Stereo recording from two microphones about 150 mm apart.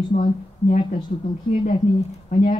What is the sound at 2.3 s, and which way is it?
Speech, 55° left (ahead or behind).